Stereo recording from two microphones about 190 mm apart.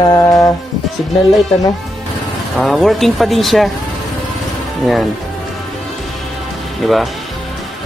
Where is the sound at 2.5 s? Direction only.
Centre (ahead or behind).